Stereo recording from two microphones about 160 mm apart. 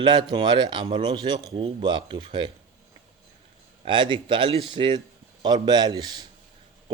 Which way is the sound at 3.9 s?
30° right (ahead or behind).